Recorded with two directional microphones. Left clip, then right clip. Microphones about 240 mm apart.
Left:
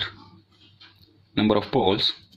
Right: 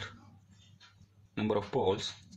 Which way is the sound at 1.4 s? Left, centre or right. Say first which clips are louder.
Left 10 dB; left.